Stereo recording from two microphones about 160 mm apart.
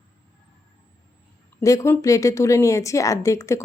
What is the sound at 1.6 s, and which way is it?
A woman's voice, 20° left (ahead or behind).